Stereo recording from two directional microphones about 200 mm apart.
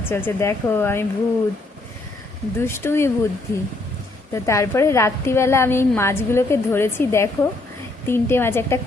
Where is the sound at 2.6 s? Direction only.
10° left (ahead or behind).